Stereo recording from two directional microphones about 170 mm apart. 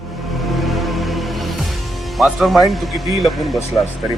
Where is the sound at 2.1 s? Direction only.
Centre (ahead or behind).